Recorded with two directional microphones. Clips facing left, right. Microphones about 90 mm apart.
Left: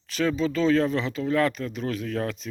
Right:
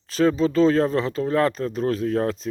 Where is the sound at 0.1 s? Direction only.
35° right (ahead or behind).